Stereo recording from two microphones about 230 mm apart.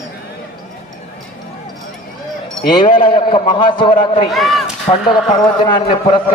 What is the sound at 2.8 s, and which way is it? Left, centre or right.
A man's voice, left.